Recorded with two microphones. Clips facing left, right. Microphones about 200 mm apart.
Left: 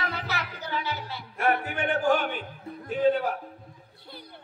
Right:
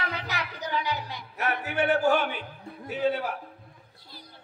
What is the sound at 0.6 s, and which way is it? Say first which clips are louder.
Music: right 2 dB; 15° right (ahead or behind).